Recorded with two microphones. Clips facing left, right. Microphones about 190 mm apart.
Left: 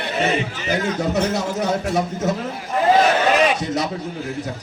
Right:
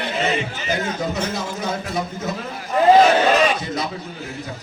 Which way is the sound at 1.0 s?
65° left (ahead or behind).